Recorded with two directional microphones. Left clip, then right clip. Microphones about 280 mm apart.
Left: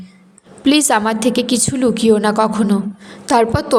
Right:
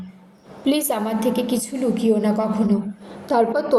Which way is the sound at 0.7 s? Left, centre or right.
Left.